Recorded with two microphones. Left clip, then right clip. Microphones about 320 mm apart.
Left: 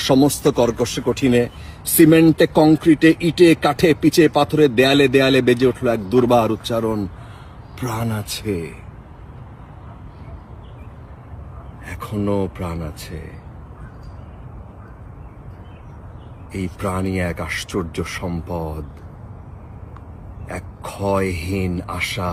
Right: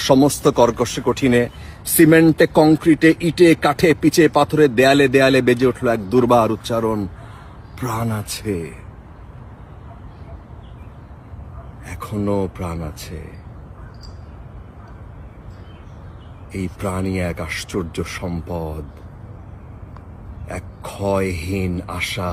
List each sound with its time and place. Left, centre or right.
0.1 s speech: centre
11.9 s speech: centre
16.5 s speech: centre
20.5 s speech: centre
21.3 s speech: right
21.6 s speech: centre